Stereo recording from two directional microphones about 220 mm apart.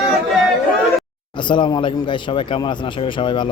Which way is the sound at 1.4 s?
20° left (ahead or behind).